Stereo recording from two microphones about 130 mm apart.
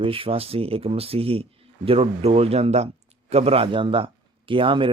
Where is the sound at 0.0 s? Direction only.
45° right (ahead or behind).